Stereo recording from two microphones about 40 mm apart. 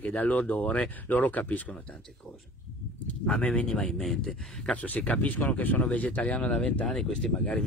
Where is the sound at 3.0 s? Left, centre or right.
Left.